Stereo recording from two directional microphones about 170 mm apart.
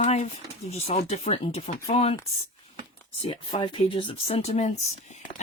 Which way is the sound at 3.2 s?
35° left (ahead or behind).